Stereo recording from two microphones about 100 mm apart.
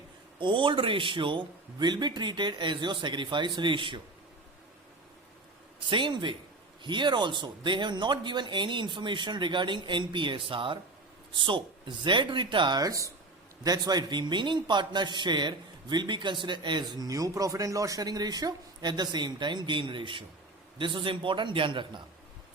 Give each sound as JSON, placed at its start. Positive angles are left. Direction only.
{"t": 0.3, "sound": "a man's voice", "side_deg": -55}
{"t": 5.8, "sound": "a man's voice", "side_deg": -55}